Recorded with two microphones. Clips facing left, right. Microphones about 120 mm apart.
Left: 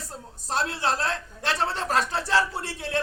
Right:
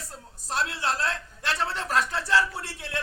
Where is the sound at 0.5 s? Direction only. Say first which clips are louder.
Left 2 dB; 25° left (ahead or behind).